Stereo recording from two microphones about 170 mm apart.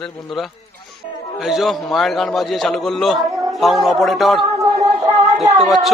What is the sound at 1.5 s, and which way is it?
A man's voice, centre (ahead or behind).